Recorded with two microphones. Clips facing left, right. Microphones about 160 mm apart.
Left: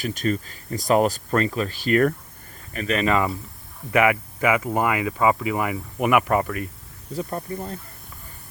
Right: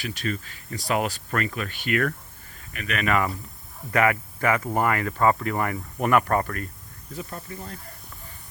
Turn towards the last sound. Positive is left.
turn(degrees=35)  # may be behind; listen again after turning